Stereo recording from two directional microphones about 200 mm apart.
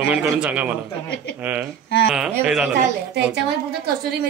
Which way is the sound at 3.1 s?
55° right (ahead or behind).